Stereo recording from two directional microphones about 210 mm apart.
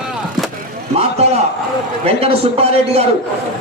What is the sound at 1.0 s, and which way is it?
Speech, 30° right (ahead or behind).